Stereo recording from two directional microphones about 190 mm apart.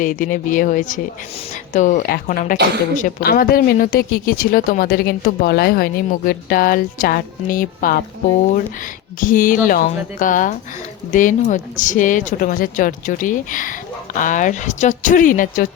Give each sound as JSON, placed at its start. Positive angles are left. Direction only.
{"t": 0.0, "sound": "a woman's voice", "side_deg": 45}